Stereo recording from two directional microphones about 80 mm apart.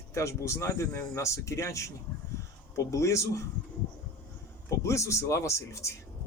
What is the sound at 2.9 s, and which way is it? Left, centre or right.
Speech, left.